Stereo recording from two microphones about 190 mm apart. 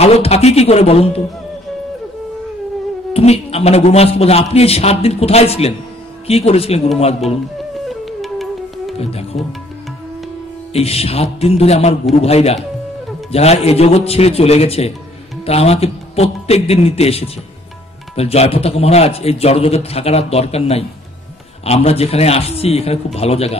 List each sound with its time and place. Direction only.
0.0 s speech: 35° left (ahead or behind)
3.1 s speech: 30° left (ahead or behind)
7.9 s music: centre (ahead or behind)
8.9 s music: 30° left (ahead or behind)
10.7 s speech: 30° left (ahead or behind)